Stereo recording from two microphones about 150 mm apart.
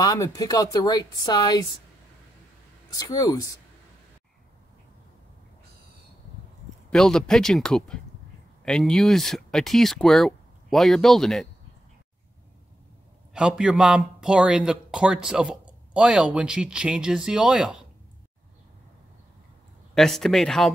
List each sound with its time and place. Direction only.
0.0 s speech: 25° left (ahead or behind)
2.9 s speech: 25° left (ahead or behind)
6.9 s a man's voice: 5° left (ahead or behind)
13.3 s a man's voice: 5° right (ahead or behind)
19.9 s a man's voice: centre (ahead or behind)